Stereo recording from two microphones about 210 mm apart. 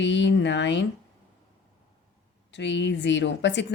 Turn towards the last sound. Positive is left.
turn(degrees=60)  # may be behind; listen again after turning